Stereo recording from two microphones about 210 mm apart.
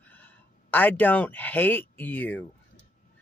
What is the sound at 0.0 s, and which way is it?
Speech, 10° left (ahead or behind).